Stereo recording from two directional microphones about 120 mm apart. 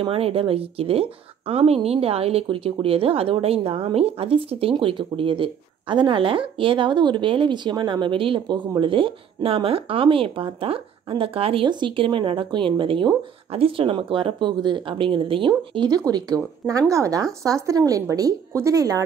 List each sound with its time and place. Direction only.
0.0 s a woman's voice: 55° right (ahead or behind); by 19.0 s 30° right (ahead or behind)